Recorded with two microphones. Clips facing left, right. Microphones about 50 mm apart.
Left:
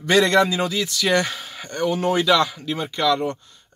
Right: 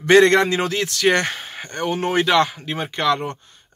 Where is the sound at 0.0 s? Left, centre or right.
Right.